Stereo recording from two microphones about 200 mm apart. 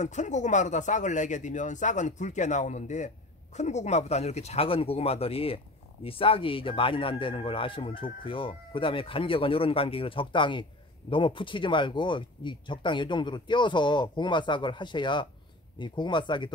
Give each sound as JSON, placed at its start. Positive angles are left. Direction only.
{"t": 0.0, "sound": "speech", "side_deg": 35}